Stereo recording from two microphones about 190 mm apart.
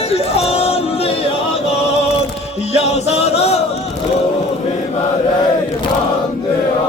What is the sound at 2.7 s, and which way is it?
Music, 35° left (ahead or behind).